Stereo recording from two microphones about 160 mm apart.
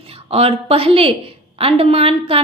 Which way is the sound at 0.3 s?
40° right (ahead or behind).